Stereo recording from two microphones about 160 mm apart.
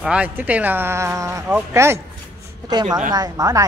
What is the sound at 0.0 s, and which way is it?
Speech, 10° right (ahead or behind).